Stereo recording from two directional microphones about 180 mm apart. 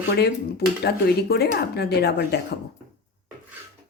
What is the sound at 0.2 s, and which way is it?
A woman's voice, 65° left (ahead or behind).